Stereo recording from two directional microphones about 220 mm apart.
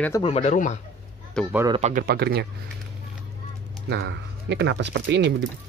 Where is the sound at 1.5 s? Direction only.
10° right (ahead or behind).